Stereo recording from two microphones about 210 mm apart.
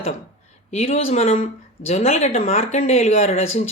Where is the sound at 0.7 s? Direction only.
30° left (ahead or behind).